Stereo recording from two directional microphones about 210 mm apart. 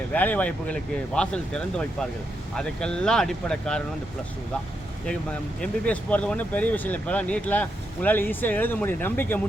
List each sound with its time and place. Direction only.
0.1 s speech: 10° left (ahead or behind)
5.5 s speech: 5° left (ahead or behind)